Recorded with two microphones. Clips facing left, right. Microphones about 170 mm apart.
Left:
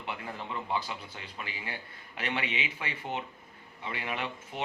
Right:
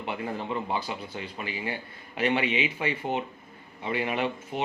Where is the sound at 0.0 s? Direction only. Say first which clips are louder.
Right 6 dB; 20° right (ahead or behind).